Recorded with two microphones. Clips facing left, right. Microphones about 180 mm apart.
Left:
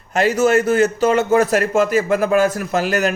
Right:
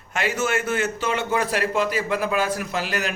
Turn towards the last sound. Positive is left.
turn(degrees=45)  # may be behind; listen again after turning